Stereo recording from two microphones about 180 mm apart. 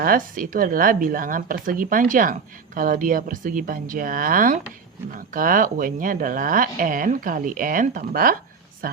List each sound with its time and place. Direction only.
0.0 s speech: 50° right (ahead or behind)